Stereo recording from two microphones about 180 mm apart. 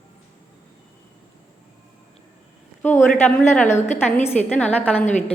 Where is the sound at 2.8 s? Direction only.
10° left (ahead or behind).